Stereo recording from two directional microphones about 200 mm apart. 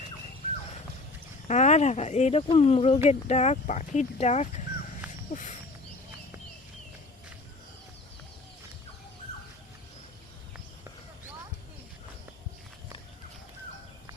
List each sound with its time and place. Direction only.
1.5 s speech: 35° left (ahead or behind)